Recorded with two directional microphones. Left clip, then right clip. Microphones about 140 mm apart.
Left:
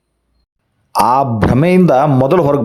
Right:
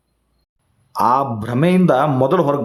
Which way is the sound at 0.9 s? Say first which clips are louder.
Left 4 dB; 50° left (ahead or behind).